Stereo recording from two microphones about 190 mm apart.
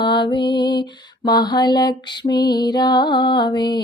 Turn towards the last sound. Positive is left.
turn(degrees=25)  # may be behind; listen again after turning